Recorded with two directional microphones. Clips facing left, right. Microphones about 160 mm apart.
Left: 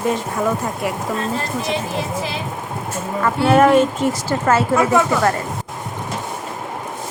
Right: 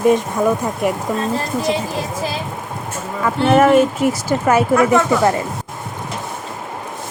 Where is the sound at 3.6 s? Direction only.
5° right (ahead or behind).